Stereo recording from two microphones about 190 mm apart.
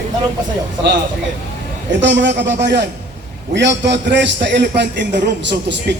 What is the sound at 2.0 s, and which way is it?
A man's voice, 70° right (ahead or behind).